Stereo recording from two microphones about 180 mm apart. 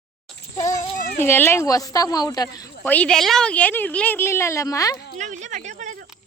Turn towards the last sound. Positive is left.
turn(degrees=-45)  # may be behind; listen again after turning